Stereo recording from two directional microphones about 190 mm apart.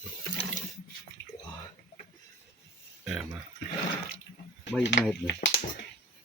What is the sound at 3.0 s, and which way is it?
Speech, 5° right (ahead or behind).